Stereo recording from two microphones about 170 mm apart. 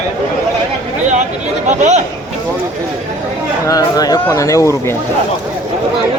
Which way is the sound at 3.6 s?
20° left (ahead or behind).